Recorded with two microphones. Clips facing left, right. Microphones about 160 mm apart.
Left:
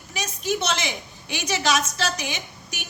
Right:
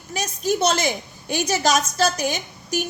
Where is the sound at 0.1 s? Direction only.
40° right (ahead or behind).